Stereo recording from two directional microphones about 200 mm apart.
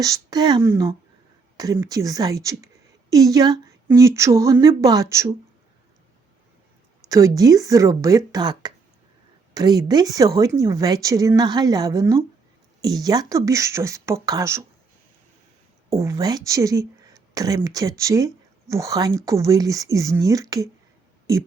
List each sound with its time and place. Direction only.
0.0 s speech: 20° right (ahead or behind)
7.1 s a woman's voice: 15° right (ahead or behind)
15.9 s speech: 15° right (ahead or behind)